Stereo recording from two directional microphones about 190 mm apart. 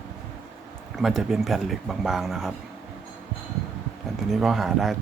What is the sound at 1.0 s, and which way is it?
Speech, 5° right (ahead or behind).